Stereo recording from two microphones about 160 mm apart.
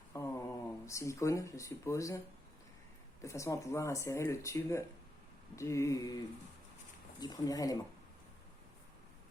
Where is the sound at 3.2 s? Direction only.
20° left (ahead or behind).